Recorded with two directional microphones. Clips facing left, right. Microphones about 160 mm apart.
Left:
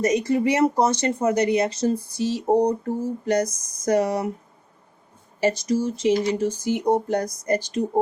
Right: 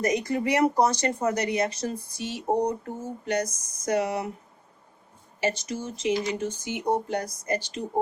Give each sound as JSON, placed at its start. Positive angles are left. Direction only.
{"t": 0.0, "sound": "speech", "side_deg": 25}
{"t": 5.4, "sound": "speech", "side_deg": 35}